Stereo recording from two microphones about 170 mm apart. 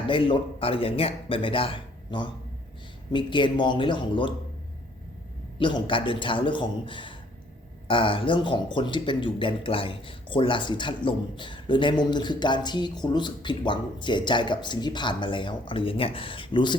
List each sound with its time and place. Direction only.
0.1 s a man's voice: 30° left (ahead or behind)
5.5 s speech: 30° left (ahead or behind)